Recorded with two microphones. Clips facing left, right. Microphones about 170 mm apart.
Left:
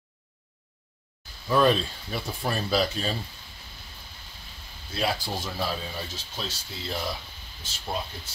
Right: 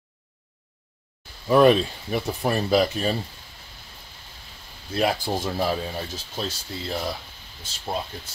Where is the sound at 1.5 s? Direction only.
20° right (ahead or behind).